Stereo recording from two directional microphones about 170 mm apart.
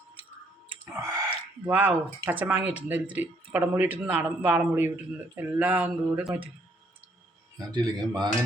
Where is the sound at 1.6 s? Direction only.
10° right (ahead or behind).